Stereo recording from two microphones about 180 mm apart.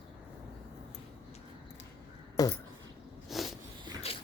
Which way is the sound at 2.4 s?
20° left (ahead or behind).